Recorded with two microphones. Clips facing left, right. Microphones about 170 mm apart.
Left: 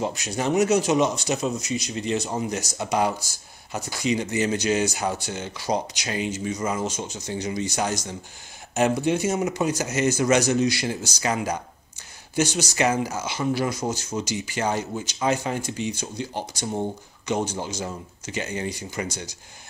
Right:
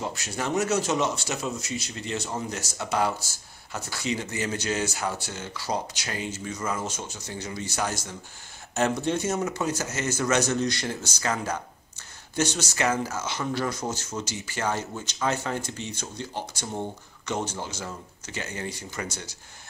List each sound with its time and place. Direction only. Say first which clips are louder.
0.0 s speech: left 5 dB; 15° left (ahead or behind)